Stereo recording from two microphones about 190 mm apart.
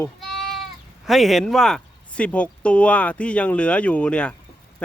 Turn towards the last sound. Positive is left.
turn(degrees=5)  # may be behind; listen again after turning